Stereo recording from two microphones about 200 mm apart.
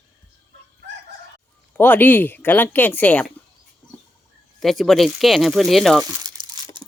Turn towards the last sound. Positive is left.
turn(degrees=-25)  # may be behind; listen again after turning